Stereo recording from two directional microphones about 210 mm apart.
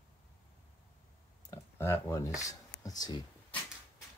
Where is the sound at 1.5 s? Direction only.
10° left (ahead or behind).